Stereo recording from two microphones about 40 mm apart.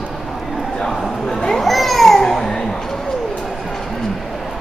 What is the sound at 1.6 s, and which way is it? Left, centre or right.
Babbling, centre.